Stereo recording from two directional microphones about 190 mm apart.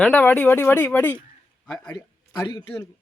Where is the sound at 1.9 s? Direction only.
20° left (ahead or behind).